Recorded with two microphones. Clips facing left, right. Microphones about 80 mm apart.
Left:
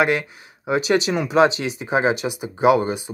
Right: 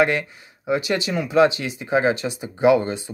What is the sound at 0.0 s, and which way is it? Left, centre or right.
Speech, centre.